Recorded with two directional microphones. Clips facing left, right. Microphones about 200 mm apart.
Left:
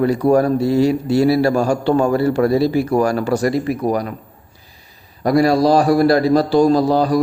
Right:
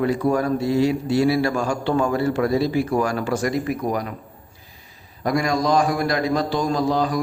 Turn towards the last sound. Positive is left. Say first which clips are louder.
# left 7 dB
turn(degrees=35)  # may be behind; listen again after turning